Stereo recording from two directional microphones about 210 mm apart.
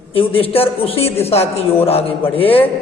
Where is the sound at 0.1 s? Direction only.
25° left (ahead or behind).